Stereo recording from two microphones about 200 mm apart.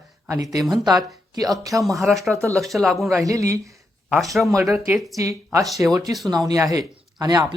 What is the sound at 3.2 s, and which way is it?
Speech, 15° right (ahead or behind).